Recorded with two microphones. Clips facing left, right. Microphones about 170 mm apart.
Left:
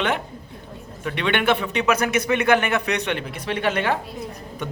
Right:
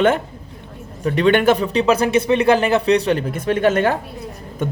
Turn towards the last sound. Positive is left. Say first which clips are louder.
# right 5 dB
turn(degrees=-45)  # may be behind; listen again after turning